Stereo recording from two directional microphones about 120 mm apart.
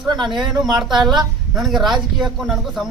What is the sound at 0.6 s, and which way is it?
Speech, 5° right (ahead or behind).